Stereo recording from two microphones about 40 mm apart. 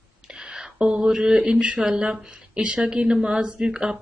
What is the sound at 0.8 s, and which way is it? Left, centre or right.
Speech, right.